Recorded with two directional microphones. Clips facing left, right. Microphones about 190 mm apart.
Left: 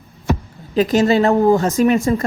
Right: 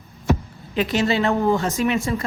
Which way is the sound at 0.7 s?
40° left (ahead or behind).